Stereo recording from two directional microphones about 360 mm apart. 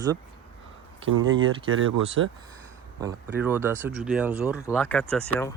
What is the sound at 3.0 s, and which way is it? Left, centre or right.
Speech, centre.